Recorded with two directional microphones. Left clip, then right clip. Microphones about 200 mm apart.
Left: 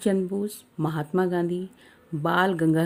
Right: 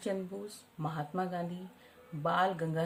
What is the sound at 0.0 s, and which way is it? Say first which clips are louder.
A woman's voice: left 12 dB; 50° left (ahead or behind).